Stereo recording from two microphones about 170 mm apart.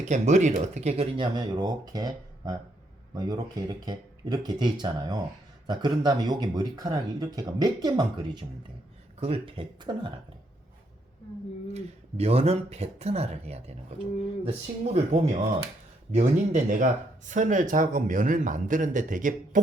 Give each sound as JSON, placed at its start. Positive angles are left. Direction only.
{"t": 0.0, "sound": "speech", "side_deg": -45}
{"t": 11.7, "sound": "speech", "side_deg": -35}
{"t": 14.9, "sound": "speech", "side_deg": -40}